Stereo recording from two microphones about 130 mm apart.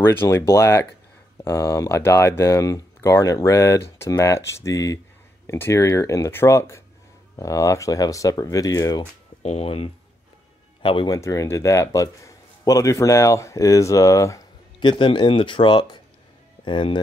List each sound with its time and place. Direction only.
0.0 s a man's voice: 20° left (ahead or behind)
9.4 s speech: 50° left (ahead or behind)
11.1 s a man's voice: 25° left (ahead or behind)
14.8 s speech: 40° left (ahead or behind)